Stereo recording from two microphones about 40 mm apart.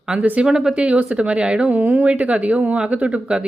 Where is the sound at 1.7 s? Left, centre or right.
Right.